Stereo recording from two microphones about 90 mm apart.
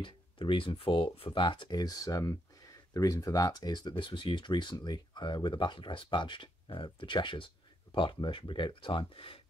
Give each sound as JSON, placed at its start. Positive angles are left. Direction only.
{"t": 0.0, "sound": "speech", "side_deg": 70}
{"t": 1.7, "sound": "speech", "side_deg": 45}
{"t": 4.0, "sound": "speech", "side_deg": 65}